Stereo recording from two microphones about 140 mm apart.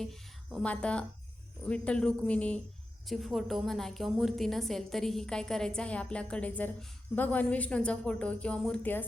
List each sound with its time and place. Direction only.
0.0 s a woman's voice: 5° left (ahead or behind)